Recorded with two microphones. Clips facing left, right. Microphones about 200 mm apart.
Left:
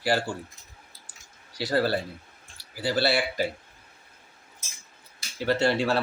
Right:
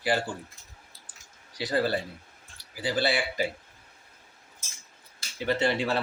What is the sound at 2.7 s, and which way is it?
Speech, 15° right (ahead or behind).